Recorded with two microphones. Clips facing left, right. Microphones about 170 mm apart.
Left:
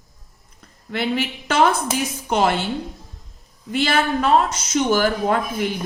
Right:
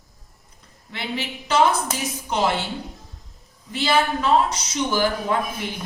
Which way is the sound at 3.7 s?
55° left (ahead or behind).